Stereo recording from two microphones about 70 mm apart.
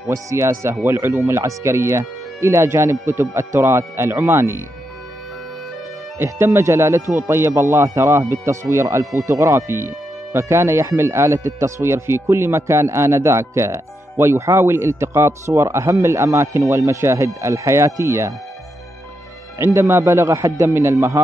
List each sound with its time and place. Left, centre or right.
0.1 s speech: right
6.1 s speech: right
19.7 s speech: right